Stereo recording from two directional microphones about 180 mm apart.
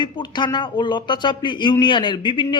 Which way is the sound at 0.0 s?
25° left (ahead or behind).